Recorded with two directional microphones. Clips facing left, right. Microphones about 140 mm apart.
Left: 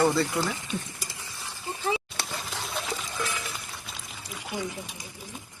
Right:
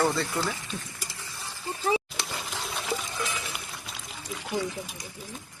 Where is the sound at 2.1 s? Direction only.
Centre (ahead or behind).